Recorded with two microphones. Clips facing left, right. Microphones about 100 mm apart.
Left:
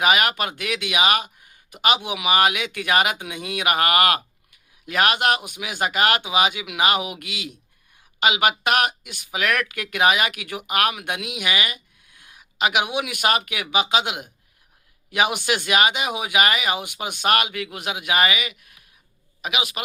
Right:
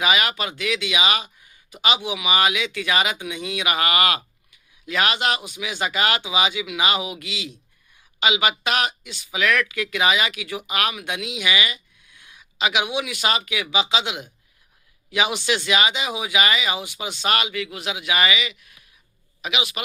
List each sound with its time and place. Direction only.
0.0 s a man's voice: 50° left (ahead or behind)